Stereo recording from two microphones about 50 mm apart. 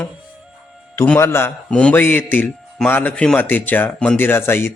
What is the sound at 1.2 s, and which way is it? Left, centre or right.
Speech, left.